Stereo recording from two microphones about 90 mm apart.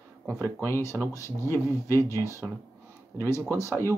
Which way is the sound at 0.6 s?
30° left (ahead or behind).